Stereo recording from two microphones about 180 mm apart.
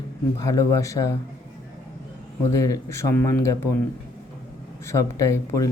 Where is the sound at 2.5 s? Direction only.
15° left (ahead or behind).